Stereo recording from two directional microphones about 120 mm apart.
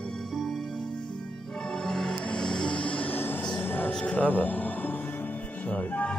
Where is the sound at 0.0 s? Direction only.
5° left (ahead or behind).